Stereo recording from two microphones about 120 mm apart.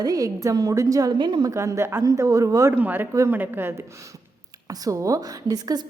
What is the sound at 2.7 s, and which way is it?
A woman's voice, 15° right (ahead or behind).